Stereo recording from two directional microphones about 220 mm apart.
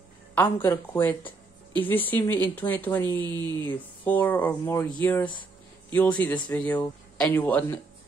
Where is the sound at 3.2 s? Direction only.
20° right (ahead or behind).